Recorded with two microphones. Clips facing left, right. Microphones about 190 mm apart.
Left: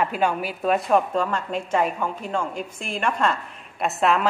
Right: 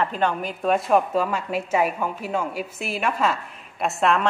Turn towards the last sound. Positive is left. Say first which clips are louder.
# even
turn(degrees=0)  # may be behind; listen again after turning